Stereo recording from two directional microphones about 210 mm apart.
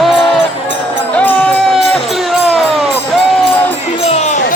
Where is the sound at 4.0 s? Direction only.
30° left (ahead or behind).